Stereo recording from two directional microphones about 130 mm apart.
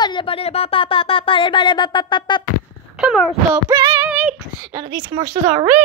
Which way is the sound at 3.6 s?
25° right (ahead or behind).